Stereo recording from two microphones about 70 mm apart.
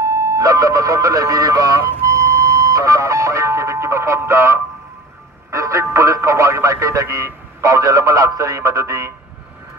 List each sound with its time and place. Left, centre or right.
0.0 s vehicle: right
2.0 s music: right
4.3 s speech: right
5.5 s music: right
5.9 s speech: right